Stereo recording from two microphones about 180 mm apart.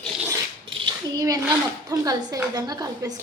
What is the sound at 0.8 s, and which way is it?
A woman's voice, 25° right (ahead or behind).